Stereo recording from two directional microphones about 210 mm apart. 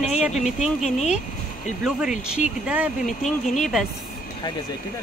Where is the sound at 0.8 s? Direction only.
35° left (ahead or behind).